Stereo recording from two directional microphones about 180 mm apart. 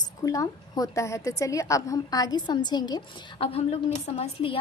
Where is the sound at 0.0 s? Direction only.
20° left (ahead or behind).